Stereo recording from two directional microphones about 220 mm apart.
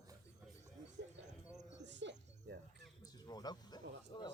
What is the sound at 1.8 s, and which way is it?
Music, 55° right (ahead or behind).